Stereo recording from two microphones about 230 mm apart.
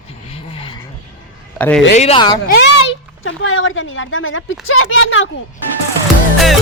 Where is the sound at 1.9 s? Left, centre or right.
Left.